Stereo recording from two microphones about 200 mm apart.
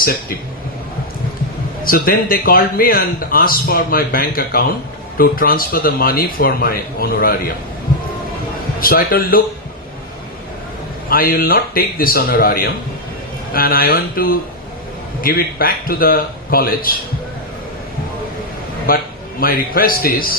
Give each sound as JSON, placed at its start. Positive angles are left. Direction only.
{"t": 1.8, "sound": "a man's voice", "side_deg": 45}
{"t": 8.8, "sound": "a man's voice", "side_deg": 45}
{"t": 11.1, "sound": "a man's voice", "side_deg": 45}
{"t": 18.9, "sound": "a man's voice", "side_deg": 45}